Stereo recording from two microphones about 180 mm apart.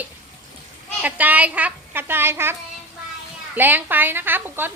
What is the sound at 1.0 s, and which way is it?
Speech, 10° right (ahead or behind).